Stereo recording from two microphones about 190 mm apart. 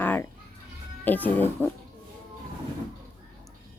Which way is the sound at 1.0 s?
10° left (ahead or behind).